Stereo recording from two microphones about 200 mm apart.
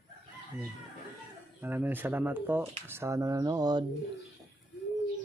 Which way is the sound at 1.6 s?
10° right (ahead or behind).